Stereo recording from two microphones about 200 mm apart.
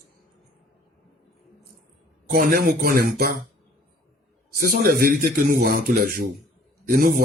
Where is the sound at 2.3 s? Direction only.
45° right (ahead or behind).